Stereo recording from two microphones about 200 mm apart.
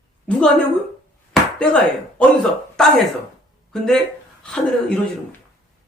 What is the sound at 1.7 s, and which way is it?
Speech, 5° left (ahead or behind).